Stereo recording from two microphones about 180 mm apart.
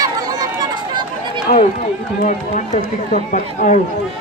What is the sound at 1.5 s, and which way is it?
Speech, 40° left (ahead or behind).